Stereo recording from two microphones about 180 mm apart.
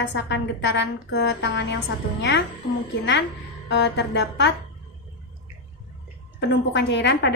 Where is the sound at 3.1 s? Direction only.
80° left.